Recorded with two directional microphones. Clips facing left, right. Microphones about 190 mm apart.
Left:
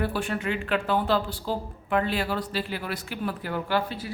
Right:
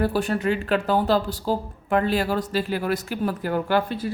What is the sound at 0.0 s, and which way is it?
Speech, 40° right (ahead or behind).